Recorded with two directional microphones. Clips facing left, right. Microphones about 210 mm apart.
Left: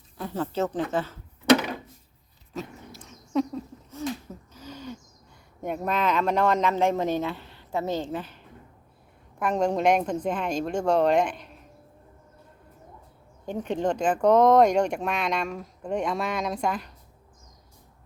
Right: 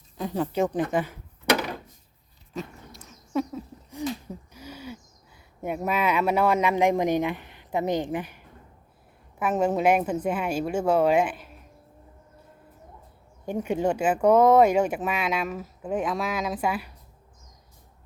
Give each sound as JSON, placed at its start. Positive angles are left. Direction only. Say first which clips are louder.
{"t": 0.2, "sound": "speech", "louder": "right 2 dB", "side_deg": -15}
{"t": 2.5, "sound": "dog", "louder": "even", "side_deg": 0}
{"t": 4.0, "sound": "a sound", "louder": "right 1 dB", "side_deg": -15}
{"t": 5.6, "sound": "speech", "louder": "right 1 dB", "side_deg": -5}
{"t": 13.4, "sound": "speech", "louder": "right 2 dB", "side_deg": -10}